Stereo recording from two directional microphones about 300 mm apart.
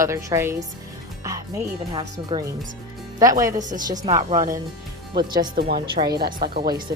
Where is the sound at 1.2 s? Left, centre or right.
Centre.